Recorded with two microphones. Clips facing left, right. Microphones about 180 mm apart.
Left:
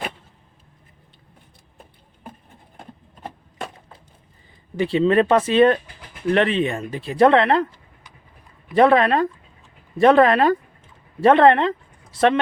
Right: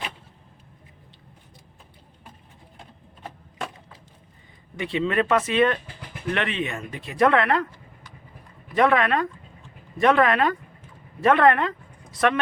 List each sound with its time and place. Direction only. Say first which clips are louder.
4.8 s speech: left 7 dB; 35° left (ahead or behind)
8.7 s speech: left 5 dB; 30° left (ahead or behind)